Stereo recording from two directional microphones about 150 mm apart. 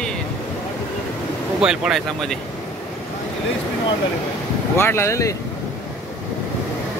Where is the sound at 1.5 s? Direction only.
5° right (ahead or behind).